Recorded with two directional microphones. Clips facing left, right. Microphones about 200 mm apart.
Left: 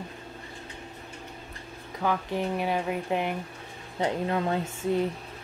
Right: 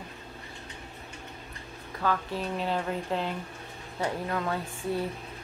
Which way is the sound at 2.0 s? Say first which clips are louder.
Left 2 dB; 15° left (ahead or behind).